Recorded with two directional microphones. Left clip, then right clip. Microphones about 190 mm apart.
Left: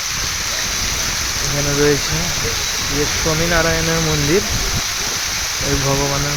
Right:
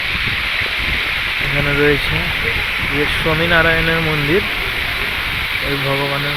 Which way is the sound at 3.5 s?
Centre (ahead or behind).